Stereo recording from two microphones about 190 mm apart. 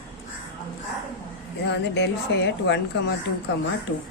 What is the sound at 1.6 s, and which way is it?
A woman's voice, 65° left (ahead or behind).